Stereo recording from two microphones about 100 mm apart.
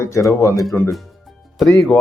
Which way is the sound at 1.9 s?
15° left (ahead or behind).